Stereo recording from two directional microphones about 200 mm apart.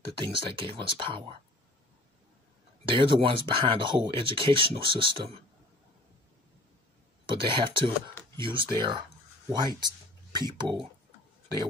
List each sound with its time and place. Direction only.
0.2 s speech: 25° right (ahead or behind)
2.8 s speech: 25° right (ahead or behind)
7.2 s speech: 25° right (ahead or behind)